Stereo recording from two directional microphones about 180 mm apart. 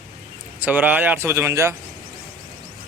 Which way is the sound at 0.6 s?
10° right (ahead or behind).